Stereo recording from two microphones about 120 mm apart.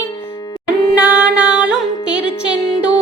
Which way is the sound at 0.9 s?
15° right (ahead or behind).